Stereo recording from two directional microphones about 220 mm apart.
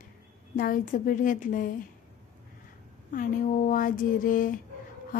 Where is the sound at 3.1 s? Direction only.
35° left (ahead or behind).